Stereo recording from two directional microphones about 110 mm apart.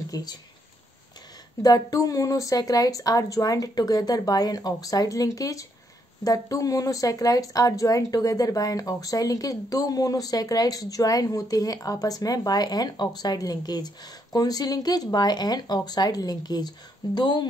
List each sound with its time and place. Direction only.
0.1 s speech: 35° left (ahead or behind)
1.6 s speech: 35° left (ahead or behind)